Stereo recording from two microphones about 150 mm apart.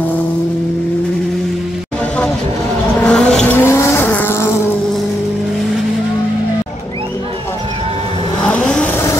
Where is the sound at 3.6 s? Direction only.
15° left (ahead or behind).